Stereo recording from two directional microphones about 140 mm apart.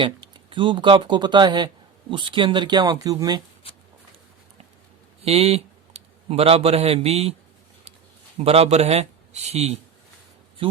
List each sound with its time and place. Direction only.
0.0 s speech: 35° right (ahead or behind)
5.2 s speech: 45° right (ahead or behind)
8.4 s a man's voice: 45° right (ahead or behind)
10.6 s speech: 40° right (ahead or behind)